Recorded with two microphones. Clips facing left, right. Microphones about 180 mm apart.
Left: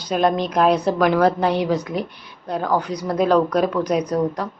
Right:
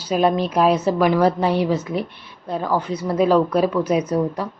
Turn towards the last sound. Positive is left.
turn(degrees=-5)  # may be behind; listen again after turning